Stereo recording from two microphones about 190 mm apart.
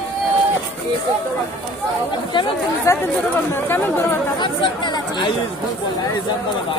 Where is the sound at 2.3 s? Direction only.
25° left (ahead or behind).